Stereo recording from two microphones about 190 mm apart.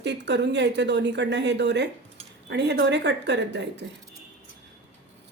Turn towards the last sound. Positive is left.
turn(degrees=-65)  # may be behind; listen again after turning